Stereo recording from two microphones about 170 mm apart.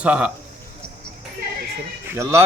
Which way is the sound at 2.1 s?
15° right (ahead or behind).